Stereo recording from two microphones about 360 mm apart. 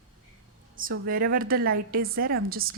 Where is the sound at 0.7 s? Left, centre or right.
Right.